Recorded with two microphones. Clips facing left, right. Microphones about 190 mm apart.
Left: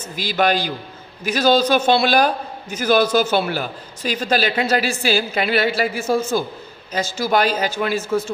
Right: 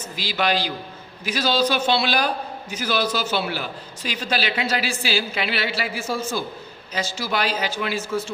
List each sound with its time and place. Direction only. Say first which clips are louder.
0.2 s a man's voice: left 4 dB; 50° left (ahead or behind)